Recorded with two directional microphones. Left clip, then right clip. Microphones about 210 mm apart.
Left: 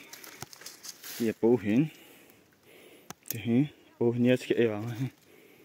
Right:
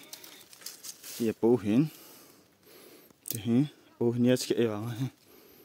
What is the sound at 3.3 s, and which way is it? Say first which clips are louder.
Speech: even; 15° right (ahead or behind).